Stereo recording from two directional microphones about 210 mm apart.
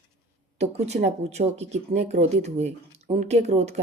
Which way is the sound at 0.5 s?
30° right (ahead or behind).